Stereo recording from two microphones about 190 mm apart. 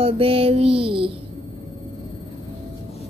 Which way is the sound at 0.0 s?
30° right (ahead or behind).